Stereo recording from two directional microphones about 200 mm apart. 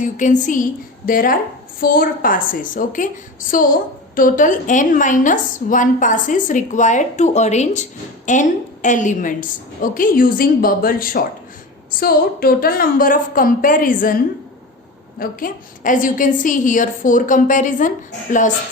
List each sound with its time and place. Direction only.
0.0 s a woman's voice: 40° left (ahead or behind)
15.2 s a woman's voice: 45° left (ahead or behind)